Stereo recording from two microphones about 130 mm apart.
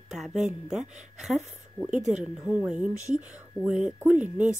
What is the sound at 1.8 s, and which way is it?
Speech, 15° left (ahead or behind).